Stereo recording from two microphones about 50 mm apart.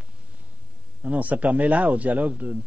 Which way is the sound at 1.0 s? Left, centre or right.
Right.